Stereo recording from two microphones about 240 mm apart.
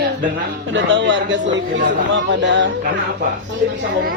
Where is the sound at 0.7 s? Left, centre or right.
Right.